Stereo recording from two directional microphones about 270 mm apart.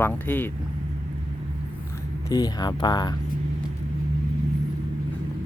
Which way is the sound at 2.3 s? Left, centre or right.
Centre.